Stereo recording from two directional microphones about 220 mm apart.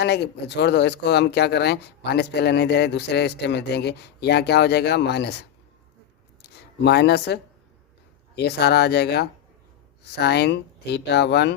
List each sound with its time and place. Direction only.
0.0 s speech: 50° left (ahead or behind)
6.8 s speech: 50° left (ahead or behind)
8.4 s speech: 50° left (ahead or behind)